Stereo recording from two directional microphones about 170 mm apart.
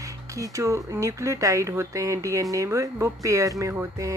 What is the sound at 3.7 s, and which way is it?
Music, 15° right (ahead or behind).